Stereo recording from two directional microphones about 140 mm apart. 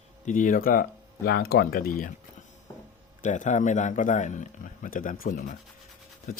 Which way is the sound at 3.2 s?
60° left (ahead or behind).